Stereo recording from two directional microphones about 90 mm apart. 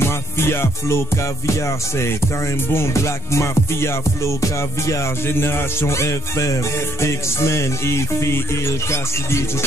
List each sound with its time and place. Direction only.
0.4 s music: 25° left (ahead or behind)
2.7 s music: 30° left (ahead or behind)